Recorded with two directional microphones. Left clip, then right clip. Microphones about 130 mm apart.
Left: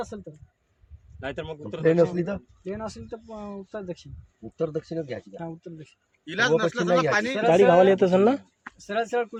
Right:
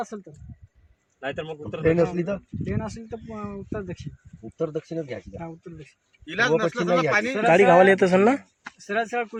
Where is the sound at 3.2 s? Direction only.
55° left (ahead or behind).